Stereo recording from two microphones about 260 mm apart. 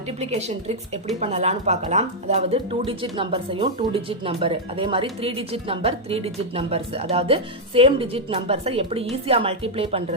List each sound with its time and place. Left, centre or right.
0.2 s speech: right